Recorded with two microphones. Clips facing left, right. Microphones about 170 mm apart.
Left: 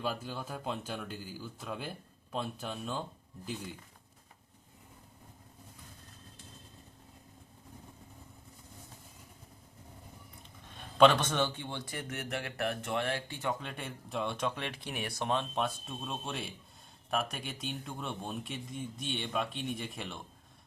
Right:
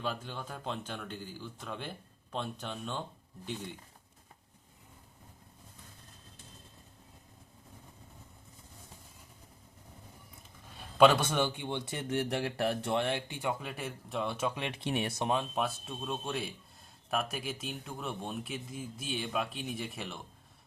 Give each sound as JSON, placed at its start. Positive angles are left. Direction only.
{"t": 0.0, "sound": "a man's voice", "side_deg": 5}
{"t": 10.8, "sound": "speech", "side_deg": -5}
{"t": 14.8, "sound": "speech", "side_deg": -30}
{"t": 15.2, "sound": "speech", "side_deg": -10}